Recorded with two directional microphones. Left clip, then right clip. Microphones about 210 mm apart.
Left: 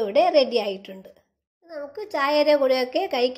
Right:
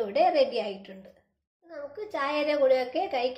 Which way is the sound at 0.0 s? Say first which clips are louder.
Left 5 dB; 40° left (ahead or behind).